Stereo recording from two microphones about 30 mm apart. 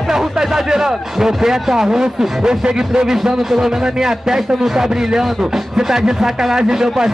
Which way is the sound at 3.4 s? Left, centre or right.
Centre.